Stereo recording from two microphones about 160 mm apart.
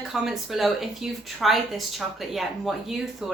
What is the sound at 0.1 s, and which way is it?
Speech, centre (ahead or behind).